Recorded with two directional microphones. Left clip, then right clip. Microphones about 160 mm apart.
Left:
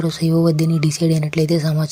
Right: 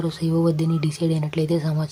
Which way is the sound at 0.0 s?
15° left (ahead or behind).